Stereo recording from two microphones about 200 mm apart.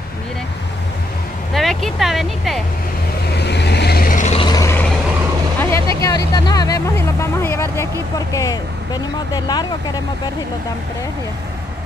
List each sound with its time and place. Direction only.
1.5 s speech: centre (ahead or behind)
3.3 s vehicle: 55° left (ahead or behind); by 4.4 s 40° left (ahead or behind)
4.4 s vehicle: 20° left (ahead or behind)
5.6 s speech: 15° left (ahead or behind)